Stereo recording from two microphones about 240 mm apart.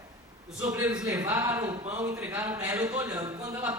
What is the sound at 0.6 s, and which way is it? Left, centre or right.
A man's voice, centre.